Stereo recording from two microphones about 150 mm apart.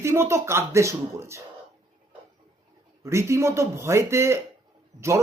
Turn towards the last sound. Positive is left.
turn(degrees=-20)  # may be behind; listen again after turning